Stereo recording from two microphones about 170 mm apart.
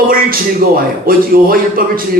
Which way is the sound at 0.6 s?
60° right (ahead or behind).